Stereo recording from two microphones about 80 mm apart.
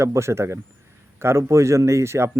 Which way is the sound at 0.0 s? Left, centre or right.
Right.